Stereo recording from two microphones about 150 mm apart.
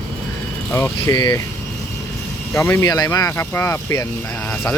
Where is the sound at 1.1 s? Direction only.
30° left (ahead or behind).